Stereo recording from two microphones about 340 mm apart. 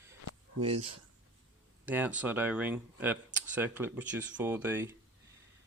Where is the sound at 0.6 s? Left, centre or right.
Centre.